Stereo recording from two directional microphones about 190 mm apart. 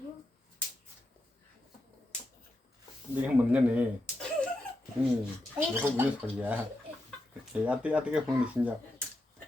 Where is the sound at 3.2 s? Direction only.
5° right (ahead or behind).